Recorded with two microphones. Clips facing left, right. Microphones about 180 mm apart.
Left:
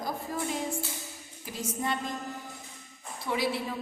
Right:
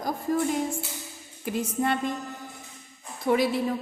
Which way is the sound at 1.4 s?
60° right (ahead or behind).